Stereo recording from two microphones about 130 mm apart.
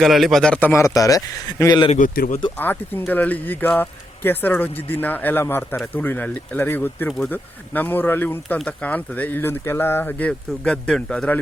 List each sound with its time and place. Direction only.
0.0 s a man's voice: centre (ahead or behind)
0.7 s a man's voice: 25° left (ahead or behind)
2.0 s speech: 85° left
2.6 s speech: 15° left (ahead or behind)